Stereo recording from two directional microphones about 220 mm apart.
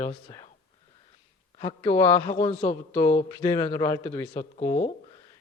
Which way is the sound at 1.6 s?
20° left (ahead or behind).